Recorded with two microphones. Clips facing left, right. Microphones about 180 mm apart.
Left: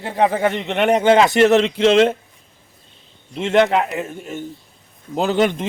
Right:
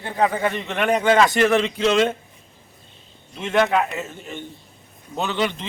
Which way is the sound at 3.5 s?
20° left (ahead or behind).